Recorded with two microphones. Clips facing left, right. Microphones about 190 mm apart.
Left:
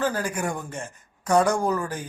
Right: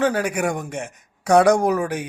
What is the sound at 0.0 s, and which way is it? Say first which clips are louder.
A man's voice: right 5 dB; 70° right (ahead or behind).